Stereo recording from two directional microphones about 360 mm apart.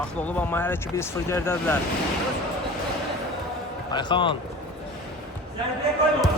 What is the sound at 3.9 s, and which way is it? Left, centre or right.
Speech, centre.